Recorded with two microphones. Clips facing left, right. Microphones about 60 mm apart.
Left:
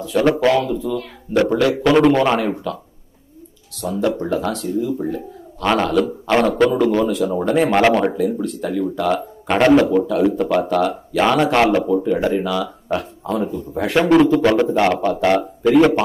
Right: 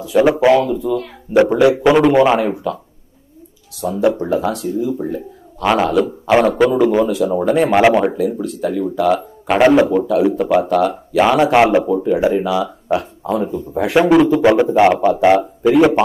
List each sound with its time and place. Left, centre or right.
0.0 s speech: centre
0.7 s speech: centre
1.3 s speech: centre
14.4 s speech: centre